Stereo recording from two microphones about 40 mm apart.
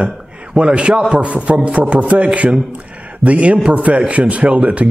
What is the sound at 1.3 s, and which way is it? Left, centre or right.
Speech, right.